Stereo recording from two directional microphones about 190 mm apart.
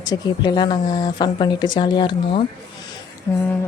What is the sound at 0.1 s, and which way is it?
Speech, 20° left (ahead or behind).